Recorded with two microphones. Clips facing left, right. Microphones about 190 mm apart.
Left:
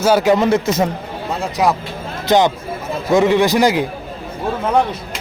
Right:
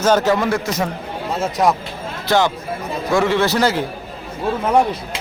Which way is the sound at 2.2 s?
20° left (ahead or behind).